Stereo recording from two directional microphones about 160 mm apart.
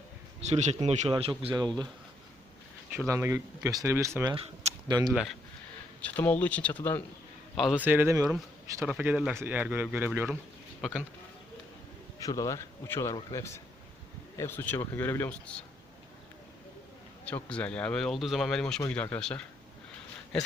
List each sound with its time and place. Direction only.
0.4 s speech: 45° right (ahead or behind)
3.1 s speech: 20° right (ahead or behind)
5.1 s speech: centre (ahead or behind)
7.5 s a man's voice: centre (ahead or behind)
7.9 s speech: 15° right (ahead or behind)
10.8 s speech: centre (ahead or behind)
12.2 s speech: 20° left (ahead or behind)
14.3 s speech: 15° left (ahead or behind)
17.2 s speech: 10° left (ahead or behind)